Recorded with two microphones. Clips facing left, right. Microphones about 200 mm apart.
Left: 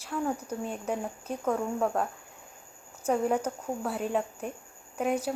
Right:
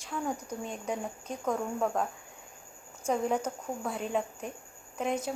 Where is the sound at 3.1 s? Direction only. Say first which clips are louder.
Left 2 dB; 5° left (ahead or behind).